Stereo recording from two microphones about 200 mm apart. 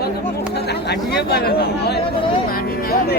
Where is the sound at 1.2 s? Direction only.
55° left (ahead or behind).